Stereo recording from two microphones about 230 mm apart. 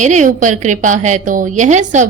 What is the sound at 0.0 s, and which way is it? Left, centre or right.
A woman's voice, right.